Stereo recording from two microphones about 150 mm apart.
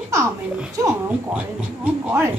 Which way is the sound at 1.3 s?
10° right (ahead or behind).